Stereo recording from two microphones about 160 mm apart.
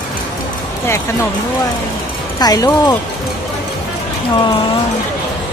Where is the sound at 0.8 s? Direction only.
15° left (ahead or behind).